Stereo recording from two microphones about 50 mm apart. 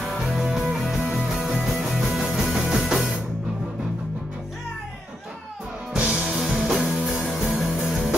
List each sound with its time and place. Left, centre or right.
0.4 s music: centre
5.9 s music: right
6.4 s music: centre